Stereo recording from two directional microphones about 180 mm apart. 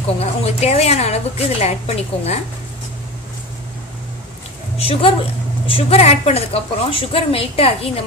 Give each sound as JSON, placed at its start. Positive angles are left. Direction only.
{"t": 0.2, "sound": "a woman's voice", "side_deg": 35}
{"t": 4.7, "sound": "a woman's voice", "side_deg": 35}